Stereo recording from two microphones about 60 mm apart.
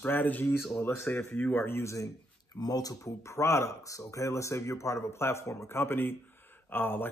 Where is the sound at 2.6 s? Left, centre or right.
Left.